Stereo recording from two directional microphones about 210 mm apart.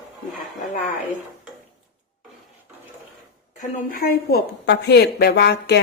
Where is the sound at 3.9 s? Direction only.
45° left (ahead or behind).